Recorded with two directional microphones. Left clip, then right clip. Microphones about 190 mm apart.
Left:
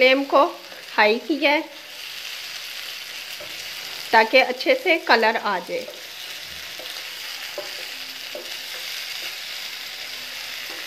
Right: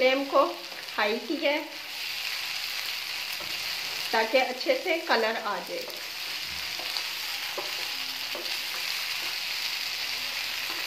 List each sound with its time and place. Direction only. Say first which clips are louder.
0.0 s speech: left 7 dB; 55° left (ahead or behind)
4.1 s frying: left 9 dB; 55° left (ahead or behind)